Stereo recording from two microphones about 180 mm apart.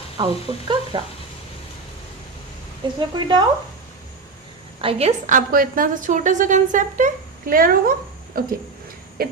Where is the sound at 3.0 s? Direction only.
25° right (ahead or behind).